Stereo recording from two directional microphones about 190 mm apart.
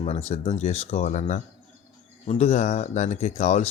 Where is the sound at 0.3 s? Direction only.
35° left (ahead or behind).